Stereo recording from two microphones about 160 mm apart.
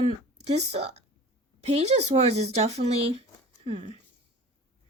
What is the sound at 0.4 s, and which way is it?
Speech, 40° right (ahead or behind).